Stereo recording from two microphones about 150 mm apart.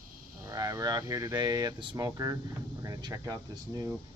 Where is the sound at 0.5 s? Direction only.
25° right (ahead or behind).